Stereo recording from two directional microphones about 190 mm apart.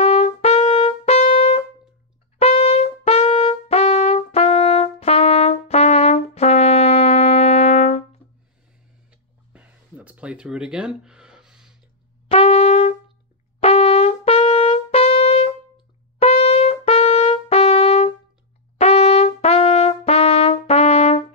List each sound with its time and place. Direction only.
0.0 s brass instrument: 35° left (ahead or behind)
9.5 s a sound: 10° right (ahead or behind)
12.3 s brass instrument: 30° left (ahead or behind)
16.2 s trumpet: 30° left (ahead or behind)
18.8 s brass instrument: 30° left (ahead or behind)